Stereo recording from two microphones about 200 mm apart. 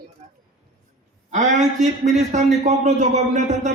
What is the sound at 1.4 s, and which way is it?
A man's voice, 35° right (ahead or behind).